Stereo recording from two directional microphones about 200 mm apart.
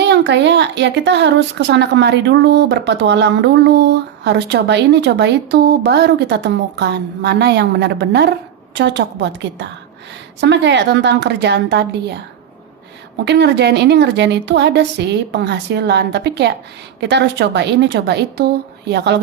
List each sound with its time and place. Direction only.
0.0 s a woman's voice: 60° right (ahead or behind)
13.2 s a woman's voice: 55° right (ahead or behind)